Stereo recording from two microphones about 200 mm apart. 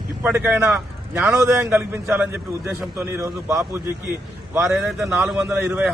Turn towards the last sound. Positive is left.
turn(degrees=-10)  # may be behind; listen again after turning